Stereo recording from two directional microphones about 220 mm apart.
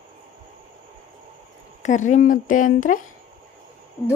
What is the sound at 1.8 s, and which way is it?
Speech, 35° left (ahead or behind).